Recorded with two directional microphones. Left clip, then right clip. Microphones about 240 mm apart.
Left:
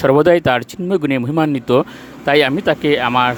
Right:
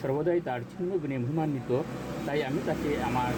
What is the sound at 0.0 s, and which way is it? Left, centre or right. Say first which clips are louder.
Speech: left 17 dB; left.